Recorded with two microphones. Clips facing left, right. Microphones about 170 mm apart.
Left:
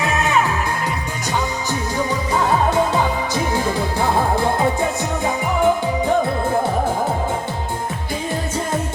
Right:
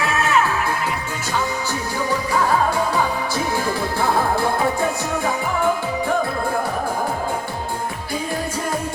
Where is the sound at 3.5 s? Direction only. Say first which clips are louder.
Left 2 dB; 20° left (ahead or behind).